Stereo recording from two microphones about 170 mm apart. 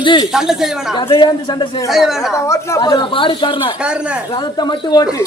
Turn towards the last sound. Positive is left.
turn(degrees=20)  # may be behind; listen again after turning